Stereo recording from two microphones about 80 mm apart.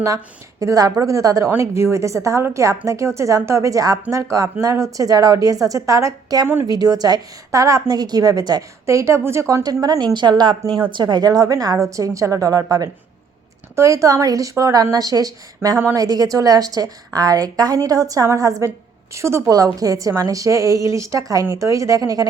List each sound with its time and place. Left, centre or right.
0.6 s a woman's voice: right
6.7 s a woman's voice: right
8.9 s a woman's voice: right
9.6 s a woman's voice: right
10.0 s a woman's voice: right